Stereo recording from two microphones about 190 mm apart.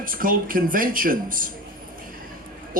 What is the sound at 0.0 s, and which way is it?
Speech, 45° right (ahead or behind).